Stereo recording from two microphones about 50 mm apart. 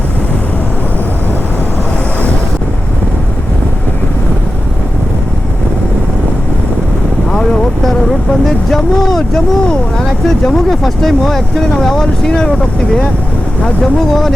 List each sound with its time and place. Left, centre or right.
7.3 s vehicle: centre
8.7 s speech: centre
14.1 s speech: centre